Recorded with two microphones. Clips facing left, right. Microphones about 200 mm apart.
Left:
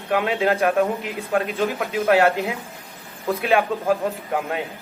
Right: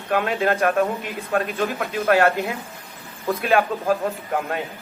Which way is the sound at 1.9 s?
15° left (ahead or behind).